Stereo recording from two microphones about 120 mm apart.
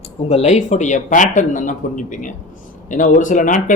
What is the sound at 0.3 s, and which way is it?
Speech, 70° left (ahead or behind).